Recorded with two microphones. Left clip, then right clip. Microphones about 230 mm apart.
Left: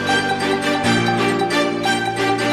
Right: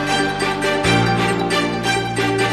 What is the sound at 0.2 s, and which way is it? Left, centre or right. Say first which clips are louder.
Music: even; centre.